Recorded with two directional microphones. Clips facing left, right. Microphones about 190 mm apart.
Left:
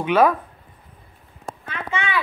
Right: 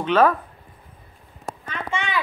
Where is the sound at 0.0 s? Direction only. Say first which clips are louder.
Left 1 dB; 10° left (ahead or behind).